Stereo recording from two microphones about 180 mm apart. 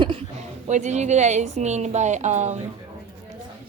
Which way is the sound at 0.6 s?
40° right (ahead or behind).